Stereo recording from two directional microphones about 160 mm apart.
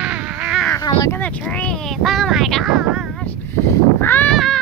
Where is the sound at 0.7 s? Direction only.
15° left (ahead or behind); by 3.3 s centre (ahead or behind).